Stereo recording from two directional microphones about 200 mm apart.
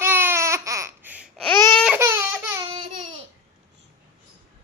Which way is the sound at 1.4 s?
10° left (ahead or behind).